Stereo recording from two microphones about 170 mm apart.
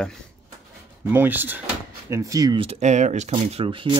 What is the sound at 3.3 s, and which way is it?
Speech, 35° right (ahead or behind).